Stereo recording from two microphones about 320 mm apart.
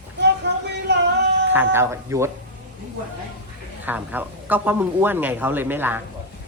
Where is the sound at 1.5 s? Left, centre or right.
Centre.